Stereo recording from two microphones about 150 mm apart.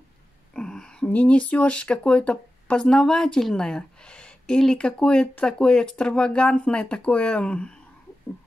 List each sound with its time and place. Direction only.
0.6 s speech: 5° left (ahead or behind)